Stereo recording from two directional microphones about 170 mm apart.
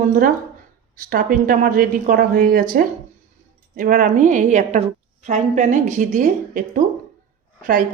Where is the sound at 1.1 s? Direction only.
55° right (ahead or behind).